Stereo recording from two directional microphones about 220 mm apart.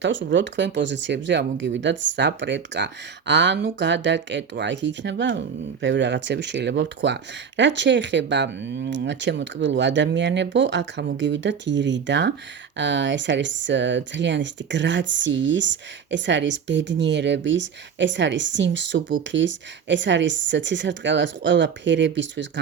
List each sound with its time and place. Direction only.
0.0 s speech: 55° right (ahead or behind)